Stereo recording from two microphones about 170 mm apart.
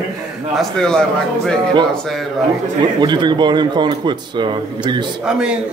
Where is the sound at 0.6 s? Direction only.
5° left (ahead or behind).